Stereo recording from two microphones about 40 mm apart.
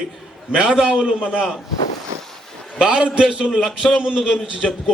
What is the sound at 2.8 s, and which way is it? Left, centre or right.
A man's voice, right.